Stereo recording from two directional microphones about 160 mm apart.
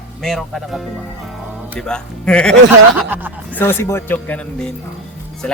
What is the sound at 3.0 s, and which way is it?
Speech, 10° right (ahead or behind).